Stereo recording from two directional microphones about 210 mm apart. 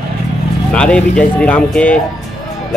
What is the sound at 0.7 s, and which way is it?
Speech, 5° left (ahead or behind).